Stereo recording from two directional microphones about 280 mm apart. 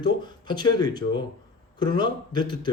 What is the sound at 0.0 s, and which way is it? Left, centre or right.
A man's voice, centre.